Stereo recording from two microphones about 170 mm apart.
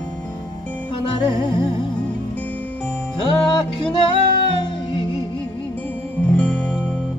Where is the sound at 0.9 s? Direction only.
30° left (ahead or behind).